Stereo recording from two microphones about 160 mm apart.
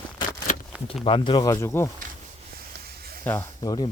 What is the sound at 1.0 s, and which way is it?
Speech, 30° left (ahead or behind).